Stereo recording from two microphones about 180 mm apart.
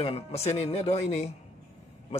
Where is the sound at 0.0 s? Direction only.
35° left (ahead or behind).